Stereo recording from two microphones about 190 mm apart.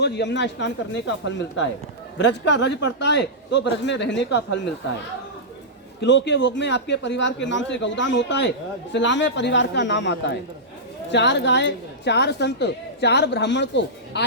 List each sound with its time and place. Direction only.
0.0 s a man's voice: 65° left (ahead or behind)
6.0 s a man's voice: 65° left (ahead or behind)